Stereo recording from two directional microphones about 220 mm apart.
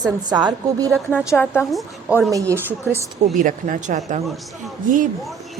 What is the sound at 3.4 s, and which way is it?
Speech, 35° right (ahead or behind).